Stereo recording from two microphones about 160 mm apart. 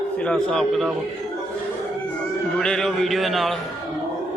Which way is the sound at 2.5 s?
5° left (ahead or behind).